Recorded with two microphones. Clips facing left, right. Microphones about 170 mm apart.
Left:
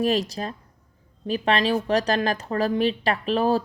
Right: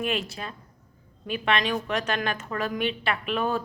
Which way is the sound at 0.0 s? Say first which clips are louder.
Left 6 dB; 35° left (ahead or behind).